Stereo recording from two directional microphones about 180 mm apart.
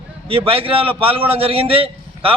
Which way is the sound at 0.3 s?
30° right (ahead or behind).